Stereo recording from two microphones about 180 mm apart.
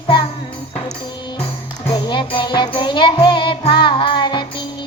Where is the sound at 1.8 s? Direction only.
25° left (ahead or behind).